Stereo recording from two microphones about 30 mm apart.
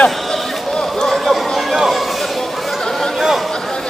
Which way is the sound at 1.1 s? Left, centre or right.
Centre.